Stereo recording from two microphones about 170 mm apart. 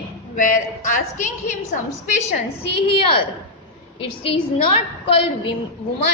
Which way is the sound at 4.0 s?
30° left (ahead or behind).